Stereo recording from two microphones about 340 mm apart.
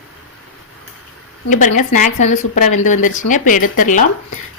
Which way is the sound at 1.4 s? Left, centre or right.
Left.